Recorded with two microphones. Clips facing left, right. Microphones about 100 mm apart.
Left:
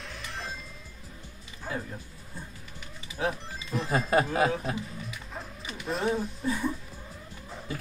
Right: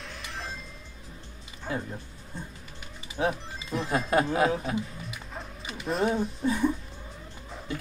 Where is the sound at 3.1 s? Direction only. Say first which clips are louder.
Right 3 dB; 20° right (ahead or behind).